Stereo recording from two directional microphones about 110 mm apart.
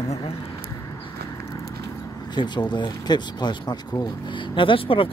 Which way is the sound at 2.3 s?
45° left (ahead or behind).